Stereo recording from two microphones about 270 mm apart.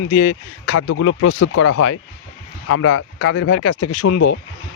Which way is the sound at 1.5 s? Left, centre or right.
Left.